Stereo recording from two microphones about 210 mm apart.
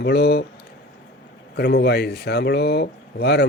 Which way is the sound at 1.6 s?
50° left (ahead or behind).